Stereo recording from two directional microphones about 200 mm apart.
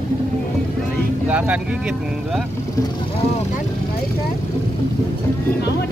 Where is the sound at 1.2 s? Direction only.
10° right (ahead or behind).